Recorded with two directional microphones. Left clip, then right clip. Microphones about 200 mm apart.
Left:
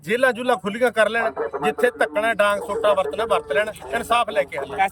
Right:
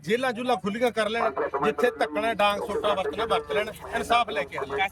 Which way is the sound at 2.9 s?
5° left (ahead or behind).